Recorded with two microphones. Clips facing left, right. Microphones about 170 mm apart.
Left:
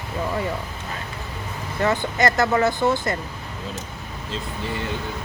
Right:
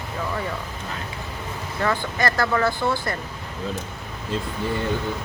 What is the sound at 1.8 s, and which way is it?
Speech, 20° left (ahead or behind).